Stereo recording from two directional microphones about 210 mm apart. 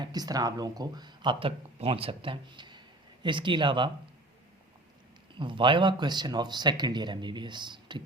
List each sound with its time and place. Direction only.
0.0 s speech: 20° right (ahead or behind)
5.4 s speech: 25° right (ahead or behind)